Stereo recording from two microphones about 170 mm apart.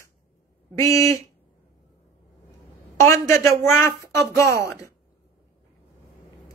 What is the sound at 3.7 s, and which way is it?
Speech, 15° left (ahead or behind).